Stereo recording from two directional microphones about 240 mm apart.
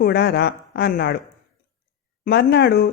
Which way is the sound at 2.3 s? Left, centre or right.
Left.